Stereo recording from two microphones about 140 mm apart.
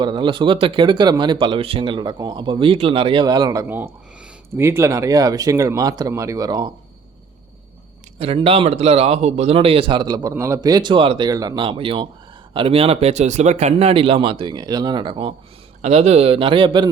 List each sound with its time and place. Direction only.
0.0 s speech: 35° right (ahead or behind)
8.2 s speech: 45° right (ahead or behind)
11.3 s speech: 30° right (ahead or behind)
15.8 s speech: 50° right (ahead or behind); by 16.9 s 35° right (ahead or behind)